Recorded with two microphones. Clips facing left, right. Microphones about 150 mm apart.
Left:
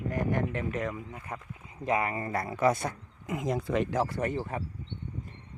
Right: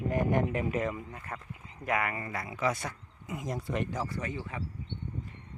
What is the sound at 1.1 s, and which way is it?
Speech, 15° left (ahead or behind).